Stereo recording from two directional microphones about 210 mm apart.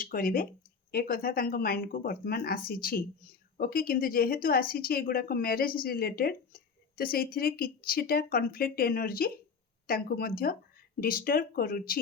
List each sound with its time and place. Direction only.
0.0 s speech: 40° left (ahead or behind)